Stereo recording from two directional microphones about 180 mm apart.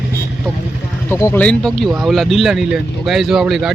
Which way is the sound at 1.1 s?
15° left (ahead or behind).